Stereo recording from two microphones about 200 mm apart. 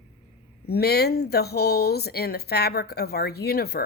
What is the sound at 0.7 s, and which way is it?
Speech, 50° left (ahead or behind).